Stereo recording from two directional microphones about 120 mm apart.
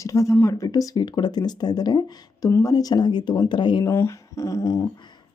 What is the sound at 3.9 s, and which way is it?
Speech, 20° left (ahead or behind).